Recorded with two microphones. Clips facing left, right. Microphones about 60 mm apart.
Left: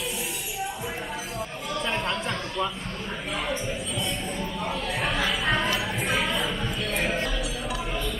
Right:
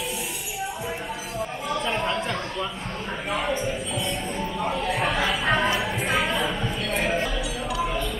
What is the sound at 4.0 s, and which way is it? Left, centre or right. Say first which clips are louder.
Music: right 2 dB; centre.